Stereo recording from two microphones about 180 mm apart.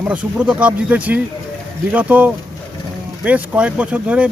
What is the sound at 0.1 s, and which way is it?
Speech, 5° right (ahead or behind).